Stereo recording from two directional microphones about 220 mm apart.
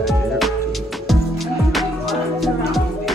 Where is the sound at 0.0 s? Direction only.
Centre (ahead or behind).